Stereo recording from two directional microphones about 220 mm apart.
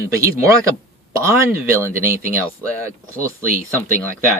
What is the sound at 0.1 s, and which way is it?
Speech, 15° right (ahead or behind).